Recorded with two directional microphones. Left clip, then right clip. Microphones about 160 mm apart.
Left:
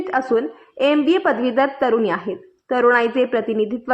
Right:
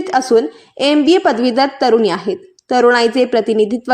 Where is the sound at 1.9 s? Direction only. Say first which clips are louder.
Right 6 dB; 45° right (ahead or behind).